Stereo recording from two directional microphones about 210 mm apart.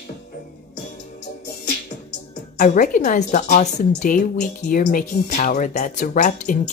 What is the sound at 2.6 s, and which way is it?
A woman's voice, 35° left (ahead or behind).